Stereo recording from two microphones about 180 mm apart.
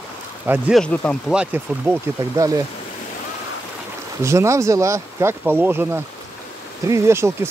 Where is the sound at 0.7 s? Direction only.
5° left (ahead or behind).